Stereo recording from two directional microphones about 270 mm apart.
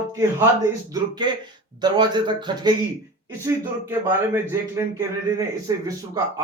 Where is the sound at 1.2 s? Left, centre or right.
Centre.